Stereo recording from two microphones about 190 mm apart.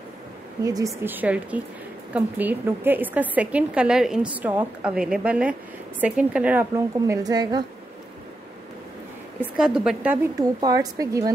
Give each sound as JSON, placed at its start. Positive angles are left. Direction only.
{"t": 0.7, "sound": "a woman's voice", "side_deg": -15}
{"t": 7.1, "sound": "a woman's voice", "side_deg": -20}
{"t": 9.4, "sound": "a woman's voice", "side_deg": -5}
{"t": 10.2, "sound": "a woman's voice", "side_deg": -20}